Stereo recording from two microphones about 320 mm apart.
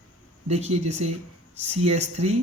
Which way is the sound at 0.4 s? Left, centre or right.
Centre.